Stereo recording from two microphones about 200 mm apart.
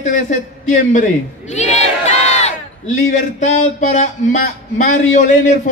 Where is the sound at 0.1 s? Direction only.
40° left (ahead or behind).